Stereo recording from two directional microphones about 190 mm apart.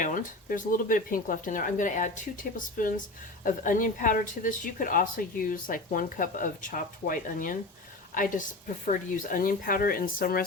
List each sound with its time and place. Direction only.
0.0 s a woman's voice: 45° left (ahead or behind)